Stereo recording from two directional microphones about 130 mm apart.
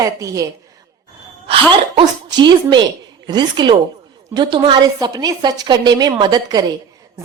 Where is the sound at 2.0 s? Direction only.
35° right (ahead or behind).